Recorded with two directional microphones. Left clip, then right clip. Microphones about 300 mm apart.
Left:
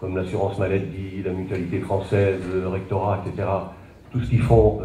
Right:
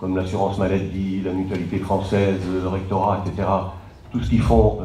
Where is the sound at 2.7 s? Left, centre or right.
Right.